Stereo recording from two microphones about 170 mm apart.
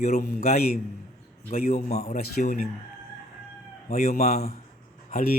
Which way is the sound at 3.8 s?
40° left (ahead or behind).